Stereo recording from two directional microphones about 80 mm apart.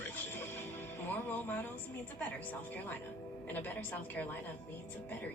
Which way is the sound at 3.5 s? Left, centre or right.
Left.